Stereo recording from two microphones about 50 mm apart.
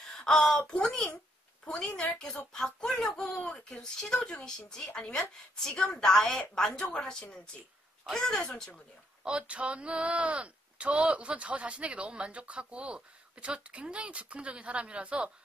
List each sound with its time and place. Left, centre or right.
0.2 s speech: centre
2.1 s speech: centre
3.4 s speech: left
9.2 s speech: right